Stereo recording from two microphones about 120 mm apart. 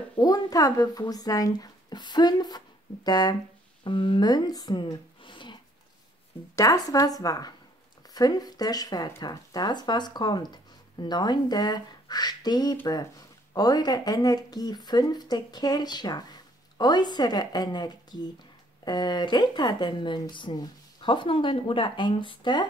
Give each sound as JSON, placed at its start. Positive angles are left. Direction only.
{"t": 0.2, "sound": "speech", "side_deg": 30}
{"t": 3.8, "sound": "speech", "side_deg": 45}
{"t": 6.5, "sound": "speech", "side_deg": 30}